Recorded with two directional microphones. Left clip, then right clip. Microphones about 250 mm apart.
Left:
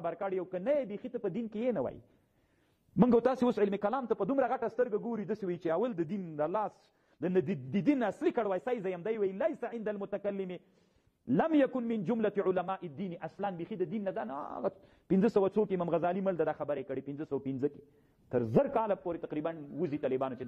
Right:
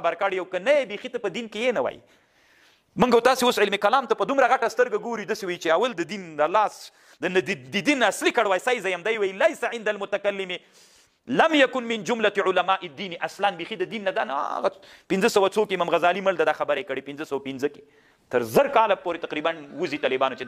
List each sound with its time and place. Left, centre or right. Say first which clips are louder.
0.0 s a man's voice: right 11 dB; centre
3.0 s a man's voice: right 9 dB; centre